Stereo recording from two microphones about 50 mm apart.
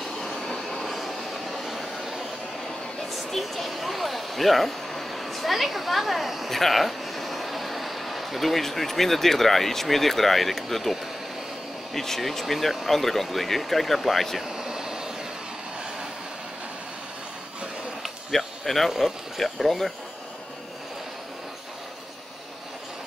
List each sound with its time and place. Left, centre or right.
0.0 s vehicle: centre
0.3 s vehicle: centre
0.6 s vehicle: centre
3.1 s speech: centre
14.5 s vehicle: centre
18.0 s speech: centre